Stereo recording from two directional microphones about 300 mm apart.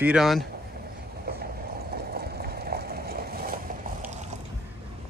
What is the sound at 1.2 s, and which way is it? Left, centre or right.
Vehicle, right.